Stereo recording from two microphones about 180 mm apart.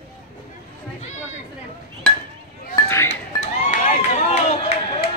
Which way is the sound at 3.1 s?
40° left (ahead or behind).